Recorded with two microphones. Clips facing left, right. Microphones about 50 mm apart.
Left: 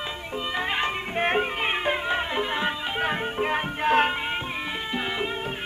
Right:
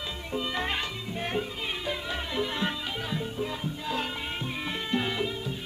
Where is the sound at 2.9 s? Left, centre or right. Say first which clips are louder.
Left 7 dB; left.